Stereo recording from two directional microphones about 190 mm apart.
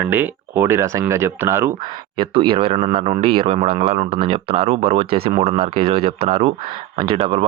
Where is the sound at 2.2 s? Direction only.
25° right (ahead or behind).